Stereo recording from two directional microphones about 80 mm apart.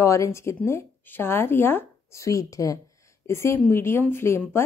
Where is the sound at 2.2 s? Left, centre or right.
Left.